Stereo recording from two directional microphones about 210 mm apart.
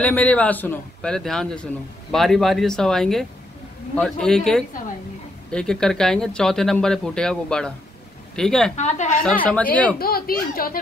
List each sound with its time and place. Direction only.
0.0 s a man's voice: 5° left (ahead or behind)
8.7 s a woman's voice: 35° left (ahead or behind)
9.2 s speech: 5° left (ahead or behind)
9.9 s a child's voice: 45° left (ahead or behind)